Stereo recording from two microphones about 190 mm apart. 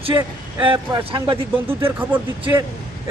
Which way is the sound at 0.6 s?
25° right (ahead or behind).